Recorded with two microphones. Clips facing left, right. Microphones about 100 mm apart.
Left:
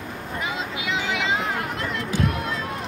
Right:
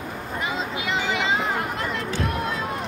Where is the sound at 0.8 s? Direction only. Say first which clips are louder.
Right 1 dB; centre (ahead or behind).